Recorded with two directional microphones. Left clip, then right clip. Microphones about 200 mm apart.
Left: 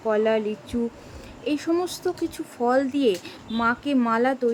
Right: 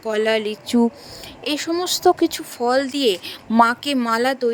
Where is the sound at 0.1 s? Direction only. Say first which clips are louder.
Right 2 dB; 50° right (ahead or behind).